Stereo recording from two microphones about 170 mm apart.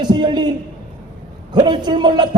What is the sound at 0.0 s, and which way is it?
Speech, 25° right (ahead or behind).